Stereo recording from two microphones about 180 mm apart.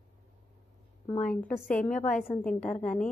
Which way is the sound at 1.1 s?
10° left (ahead or behind).